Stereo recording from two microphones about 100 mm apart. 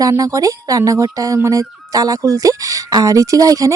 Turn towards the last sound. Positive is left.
turn(degrees=-35)  # may be behind; listen again after turning